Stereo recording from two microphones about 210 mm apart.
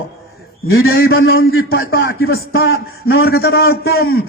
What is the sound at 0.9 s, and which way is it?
Speech, 45° left (ahead or behind).